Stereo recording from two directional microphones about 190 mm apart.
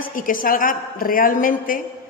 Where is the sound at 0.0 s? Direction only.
45° left (ahead or behind).